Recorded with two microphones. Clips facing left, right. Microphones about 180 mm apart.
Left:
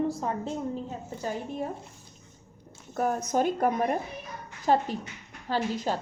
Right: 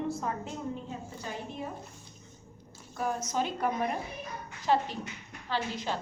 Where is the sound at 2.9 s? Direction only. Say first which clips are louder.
Left 5 dB; 50° left (ahead or behind).